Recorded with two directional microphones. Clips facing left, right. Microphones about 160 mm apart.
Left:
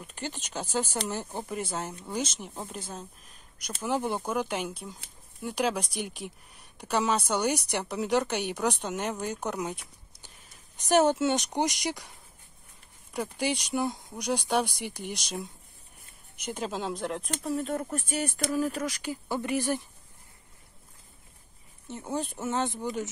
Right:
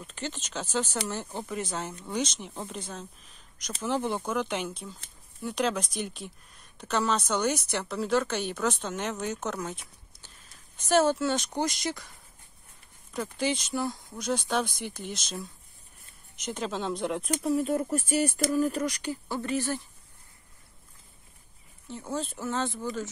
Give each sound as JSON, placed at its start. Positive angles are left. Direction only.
{"t": 0.0, "sound": "speech", "side_deg": 10}
{"t": 10.8, "sound": "speech", "side_deg": 15}
{"t": 13.1, "sound": "speech", "side_deg": 15}
{"t": 19.2, "sound": "speech", "side_deg": 15}
{"t": 21.8, "sound": "speech", "side_deg": 20}